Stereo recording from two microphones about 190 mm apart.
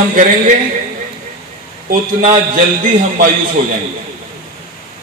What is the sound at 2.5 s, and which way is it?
Speech, 45° right (ahead or behind).